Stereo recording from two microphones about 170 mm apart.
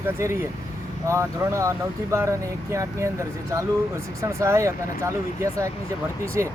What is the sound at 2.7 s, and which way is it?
Speech, 15° right (ahead or behind).